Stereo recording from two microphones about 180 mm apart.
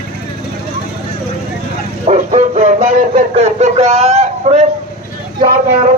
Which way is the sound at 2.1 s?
40° right (ahead or behind).